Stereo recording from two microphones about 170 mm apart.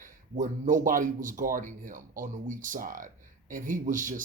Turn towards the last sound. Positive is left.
turn(degrees=-50)  # may be behind; listen again after turning